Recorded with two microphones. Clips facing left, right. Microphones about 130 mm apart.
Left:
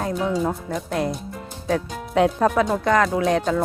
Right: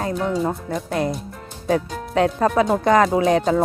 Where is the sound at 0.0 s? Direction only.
Centre (ahead or behind).